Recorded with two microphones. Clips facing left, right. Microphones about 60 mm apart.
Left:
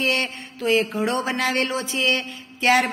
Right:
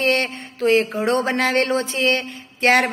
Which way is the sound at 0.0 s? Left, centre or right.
Right.